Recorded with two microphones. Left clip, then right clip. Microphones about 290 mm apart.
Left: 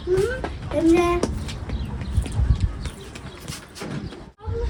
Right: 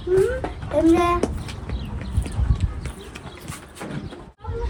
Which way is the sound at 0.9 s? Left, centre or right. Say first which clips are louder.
Even; centre.